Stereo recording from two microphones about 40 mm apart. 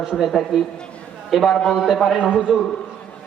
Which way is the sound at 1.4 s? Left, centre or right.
Centre.